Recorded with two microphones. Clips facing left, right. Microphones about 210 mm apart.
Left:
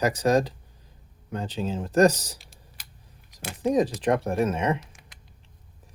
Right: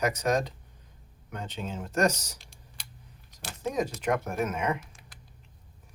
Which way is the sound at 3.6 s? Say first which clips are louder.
Left 7 dB; 35° left (ahead or behind).